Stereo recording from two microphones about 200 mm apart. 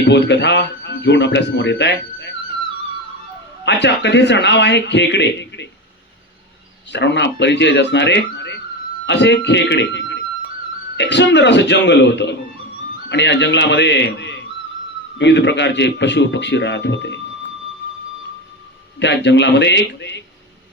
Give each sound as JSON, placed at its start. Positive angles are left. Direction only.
{"t": 0.0, "sound": "speech", "side_deg": 60}
{"t": 3.7, "sound": "speech", "side_deg": 60}
{"t": 6.9, "sound": "speech", "side_deg": 60}
{"t": 18.9, "sound": "speech", "side_deg": 60}